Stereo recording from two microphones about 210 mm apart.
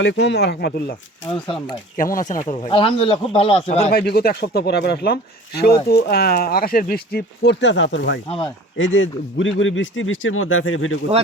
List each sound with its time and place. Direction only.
0.0 s speech: 55° left (ahead or behind); by 2.6 s 35° left (ahead or behind)
2.6 s speech: 25° left (ahead or behind)
3.9 s speech: 50° left (ahead or behind); by 10.9 s 70° left (ahead or behind)